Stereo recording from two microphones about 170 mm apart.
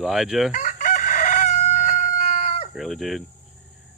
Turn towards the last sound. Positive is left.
turn(degrees=0)  # may be behind; listen again after turning